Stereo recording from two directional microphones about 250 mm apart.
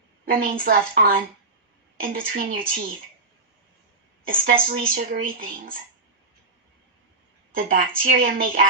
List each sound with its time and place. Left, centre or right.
0.2 s speech: right
4.5 s speech: right
7.5 s speech: right